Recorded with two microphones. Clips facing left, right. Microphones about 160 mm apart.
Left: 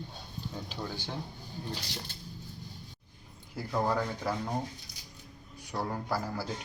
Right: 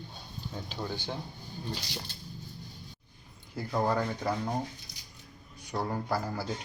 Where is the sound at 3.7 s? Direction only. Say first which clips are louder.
Right 1 dB; 5° right (ahead or behind).